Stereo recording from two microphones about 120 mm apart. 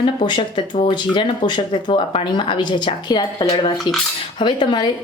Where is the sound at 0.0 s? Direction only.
40° left (ahead or behind).